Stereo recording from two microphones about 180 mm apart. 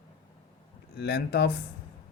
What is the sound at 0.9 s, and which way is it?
Speech, 65° left (ahead or behind).